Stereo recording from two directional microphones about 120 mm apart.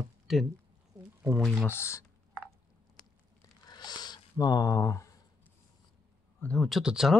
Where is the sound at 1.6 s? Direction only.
20° left (ahead or behind).